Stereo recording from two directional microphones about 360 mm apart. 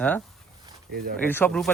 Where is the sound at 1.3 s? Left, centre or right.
Centre.